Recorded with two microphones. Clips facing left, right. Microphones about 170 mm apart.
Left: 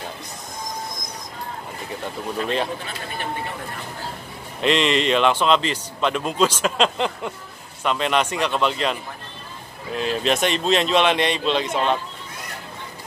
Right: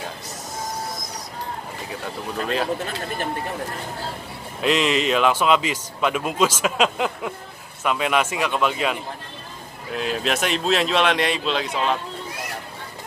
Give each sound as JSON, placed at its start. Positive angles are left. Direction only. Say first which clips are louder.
{"t": 4.6, "sound": "speech", "louder": "left 1 dB", "side_deg": -5}
{"t": 9.9, "sound": "speech", "louder": "left 2 dB", "side_deg": 0}